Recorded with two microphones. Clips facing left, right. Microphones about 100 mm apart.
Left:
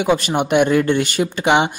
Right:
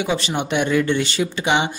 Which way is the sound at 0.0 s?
50° left (ahead or behind).